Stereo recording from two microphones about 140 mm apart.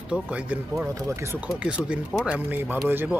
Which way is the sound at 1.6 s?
10° right (ahead or behind).